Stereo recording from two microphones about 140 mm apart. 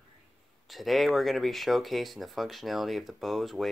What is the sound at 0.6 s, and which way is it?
Speech, centre (ahead or behind).